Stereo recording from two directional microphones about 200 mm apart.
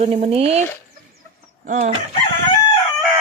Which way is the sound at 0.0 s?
35° right (ahead or behind).